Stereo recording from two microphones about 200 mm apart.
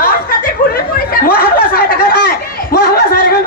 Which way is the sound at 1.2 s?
50° left (ahead or behind).